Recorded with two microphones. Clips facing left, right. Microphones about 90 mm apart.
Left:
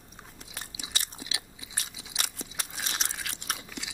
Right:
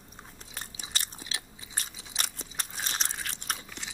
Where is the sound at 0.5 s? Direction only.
40° right (ahead or behind).